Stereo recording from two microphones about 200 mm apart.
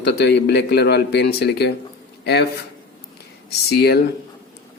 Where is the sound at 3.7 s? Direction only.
50° left (ahead or behind).